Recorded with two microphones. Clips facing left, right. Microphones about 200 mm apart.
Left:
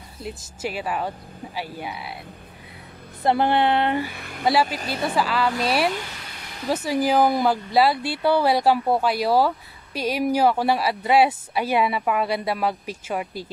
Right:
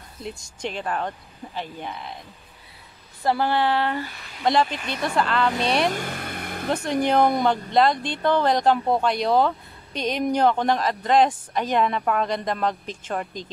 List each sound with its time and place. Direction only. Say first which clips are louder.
0.2 s speech: left 1 dB; 5° left (ahead or behind)
3.3 s a sound: left 2 dB; 20° left (ahead or behind)
4.1 s speech: left 7 dB; 55° left (ahead or behind)
4.5 s speech: even; 5° left (ahead or behind)
4.7 s a woman's voice: left 2 dB; 35° left (ahead or behind)
5.0 s speech: even; 5° left (ahead or behind)
5.9 s vehicle: right 1 dB; 50° right (ahead or behind)
6.7 s speech: left 1 dB; 5° left (ahead or behind)